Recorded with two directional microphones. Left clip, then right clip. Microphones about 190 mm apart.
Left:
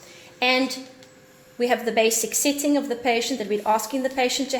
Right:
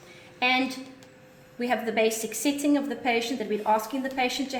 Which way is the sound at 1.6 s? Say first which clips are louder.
Left 5 dB; 50° left (ahead or behind).